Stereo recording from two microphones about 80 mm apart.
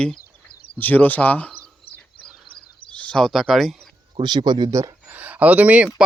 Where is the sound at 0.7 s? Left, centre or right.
Left.